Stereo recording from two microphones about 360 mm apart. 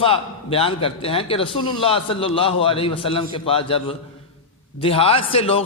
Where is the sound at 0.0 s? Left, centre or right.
Centre.